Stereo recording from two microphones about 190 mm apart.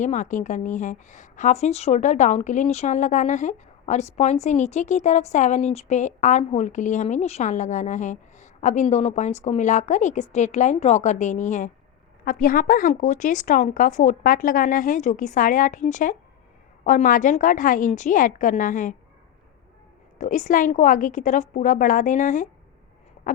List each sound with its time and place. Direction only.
0.0 s a woman's voice: 40° left (ahead or behind)
20.1 s speech: 40° left (ahead or behind)
23.3 s a sound: 45° left (ahead or behind)